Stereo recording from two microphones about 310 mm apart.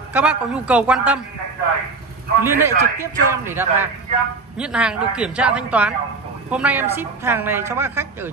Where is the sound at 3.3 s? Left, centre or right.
Centre.